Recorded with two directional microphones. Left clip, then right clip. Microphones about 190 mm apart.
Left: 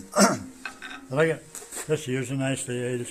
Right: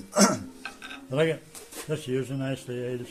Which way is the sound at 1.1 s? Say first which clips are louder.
Left 2 dB; 10° right (ahead or behind).